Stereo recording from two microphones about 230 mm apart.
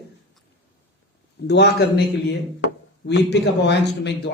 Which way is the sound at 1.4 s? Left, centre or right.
Left.